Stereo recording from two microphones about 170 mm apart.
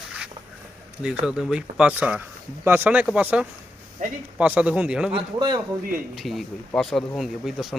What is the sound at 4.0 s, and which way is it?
Speech, 50° right (ahead or behind).